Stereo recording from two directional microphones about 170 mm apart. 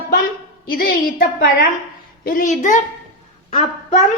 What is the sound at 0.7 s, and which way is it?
A woman's voice, 60° left (ahead or behind).